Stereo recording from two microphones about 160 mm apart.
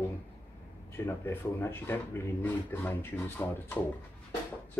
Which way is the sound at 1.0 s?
15° left (ahead or behind).